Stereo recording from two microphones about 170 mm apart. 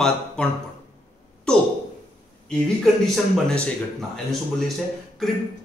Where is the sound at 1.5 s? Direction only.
5° left (ahead or behind).